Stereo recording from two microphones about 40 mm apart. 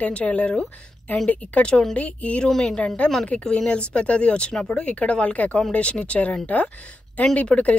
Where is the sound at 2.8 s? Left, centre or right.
Left.